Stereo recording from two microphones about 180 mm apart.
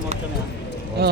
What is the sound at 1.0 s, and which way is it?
Speech, 65° right (ahead or behind).